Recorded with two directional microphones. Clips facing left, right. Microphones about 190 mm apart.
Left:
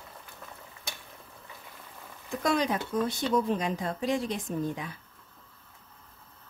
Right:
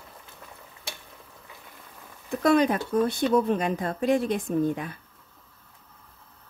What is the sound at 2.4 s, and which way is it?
Speech, 55° right (ahead or behind).